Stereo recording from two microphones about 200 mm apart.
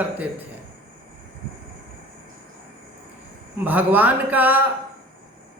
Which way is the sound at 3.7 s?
10° right (ahead or behind).